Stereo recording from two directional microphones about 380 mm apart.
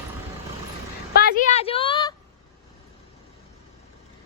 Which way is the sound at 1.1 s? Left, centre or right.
Left.